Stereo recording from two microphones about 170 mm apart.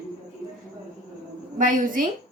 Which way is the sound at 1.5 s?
50° right (ahead or behind).